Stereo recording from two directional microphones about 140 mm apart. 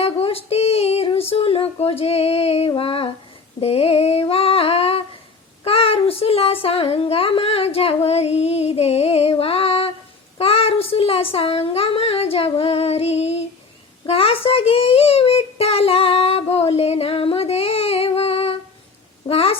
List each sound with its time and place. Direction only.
0.0 s female singing: 45° left (ahead or behind)
5.6 s child singing: 45° left (ahead or behind)
9.4 s music: 45° left (ahead or behind)
10.3 s child singing: 45° left (ahead or behind)
19.3 s a sound: 45° left (ahead or behind)